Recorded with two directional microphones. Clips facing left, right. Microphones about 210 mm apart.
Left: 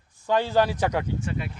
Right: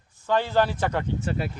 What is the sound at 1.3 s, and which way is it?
Speech, 35° right (ahead or behind).